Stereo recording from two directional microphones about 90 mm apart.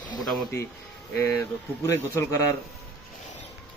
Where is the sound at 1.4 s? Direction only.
35° left (ahead or behind).